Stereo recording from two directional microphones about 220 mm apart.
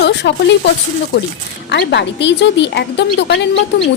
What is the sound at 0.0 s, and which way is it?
Speech, 50° left (ahead or behind).